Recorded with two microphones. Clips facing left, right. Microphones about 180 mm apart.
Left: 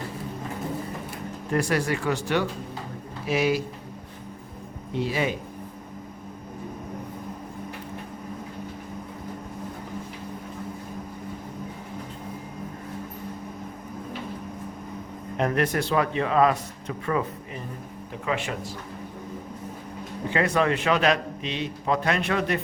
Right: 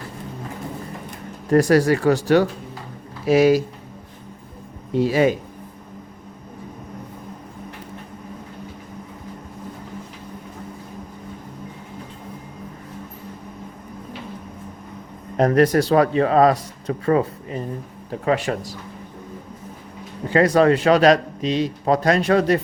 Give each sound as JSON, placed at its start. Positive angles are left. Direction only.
{"t": 1.5, "sound": "speech", "side_deg": -40}
{"t": 4.9, "sound": "speech", "side_deg": -40}
{"t": 15.4, "sound": "speech", "side_deg": -40}
{"t": 20.3, "sound": "speech", "side_deg": -40}